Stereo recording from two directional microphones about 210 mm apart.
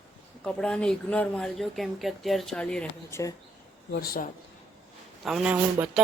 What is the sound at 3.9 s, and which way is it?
Speech, 45° left (ahead or behind).